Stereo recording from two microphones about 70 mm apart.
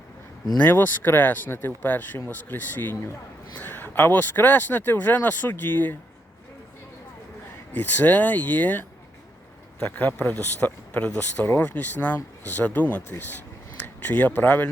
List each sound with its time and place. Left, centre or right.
0.6 s speech: left
7.7 s speech: left